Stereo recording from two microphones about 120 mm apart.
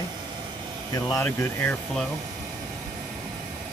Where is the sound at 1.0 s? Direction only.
25° left (ahead or behind).